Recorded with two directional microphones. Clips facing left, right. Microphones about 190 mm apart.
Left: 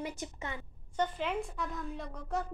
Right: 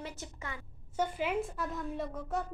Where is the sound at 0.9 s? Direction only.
10° right (ahead or behind).